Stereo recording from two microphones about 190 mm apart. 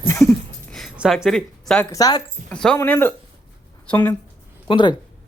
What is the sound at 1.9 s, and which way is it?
Speech, 20° left (ahead or behind).